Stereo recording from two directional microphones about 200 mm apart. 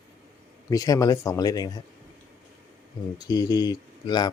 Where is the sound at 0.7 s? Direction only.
15° left (ahead or behind).